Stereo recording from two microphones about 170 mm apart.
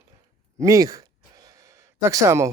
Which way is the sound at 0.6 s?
20° right (ahead or behind).